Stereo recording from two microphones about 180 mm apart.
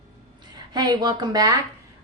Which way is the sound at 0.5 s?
20° right (ahead or behind).